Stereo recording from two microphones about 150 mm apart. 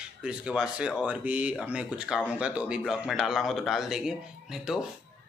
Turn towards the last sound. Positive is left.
turn(degrees=0)  # may be behind; listen again after turning